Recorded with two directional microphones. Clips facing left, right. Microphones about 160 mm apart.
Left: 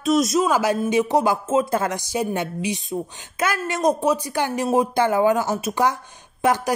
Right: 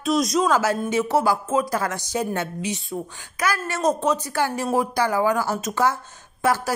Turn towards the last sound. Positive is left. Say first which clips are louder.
# left 2 dB
turn(degrees=20)  # may be behind; listen again after turning